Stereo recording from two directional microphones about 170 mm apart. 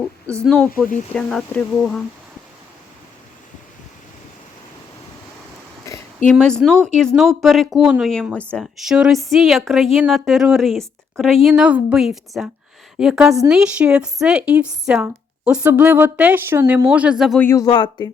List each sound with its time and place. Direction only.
0.4 s speech: 5° left (ahead or behind)
0.7 s speech: 50° left (ahead or behind)
1.1 s a woman's voice: 5° left (ahead or behind)
5.9 s a sound: 15° left (ahead or behind)
6.3 s a woman's voice: centre (ahead or behind)
17.4 s speech: 15° left (ahead or behind)